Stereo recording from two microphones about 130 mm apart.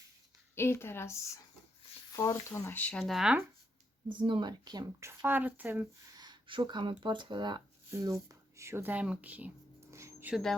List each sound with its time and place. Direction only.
0.5 s speech: 20° left (ahead or behind)
2.1 s speech: 20° left (ahead or behind)
3.0 s speech: centre (ahead or behind)
4.2 s speech: 35° right (ahead or behind); by 5.9 s 15° right (ahead or behind)
6.1 s speech: 35° right (ahead or behind)
7.9 s speech: 20° right (ahead or behind)
9.9 s dog: 20° right (ahead or behind)